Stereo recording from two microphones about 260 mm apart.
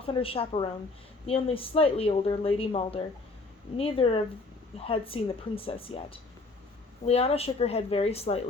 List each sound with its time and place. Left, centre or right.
0.0 s speech: left